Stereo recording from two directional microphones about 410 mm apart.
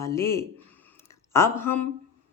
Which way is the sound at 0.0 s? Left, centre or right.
Centre.